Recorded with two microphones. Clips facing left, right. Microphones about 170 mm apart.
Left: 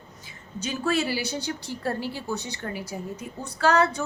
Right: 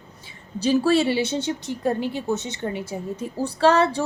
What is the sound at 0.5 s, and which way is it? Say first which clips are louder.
A woman's voice: right 8 dB; 35° right (ahead or behind).